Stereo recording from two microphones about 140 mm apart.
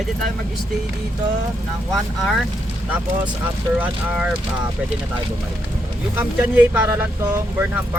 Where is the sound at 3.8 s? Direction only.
10° right (ahead or behind).